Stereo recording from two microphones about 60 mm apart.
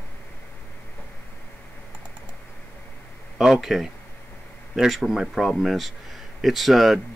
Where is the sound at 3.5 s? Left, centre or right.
Centre.